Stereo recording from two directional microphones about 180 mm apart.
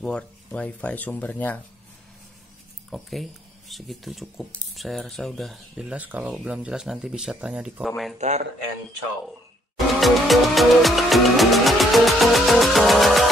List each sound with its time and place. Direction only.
0.0 s speech: 5° left (ahead or behind)
2.9 s speech: centre (ahead or behind)
8.2 s speech: 40° right (ahead or behind)
9.9 s music: centre (ahead or behind)